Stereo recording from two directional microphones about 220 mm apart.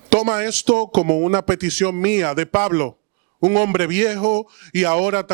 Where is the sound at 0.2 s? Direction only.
20° right (ahead or behind).